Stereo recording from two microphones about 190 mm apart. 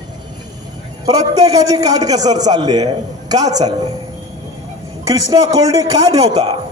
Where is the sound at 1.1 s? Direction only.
20° right (ahead or behind).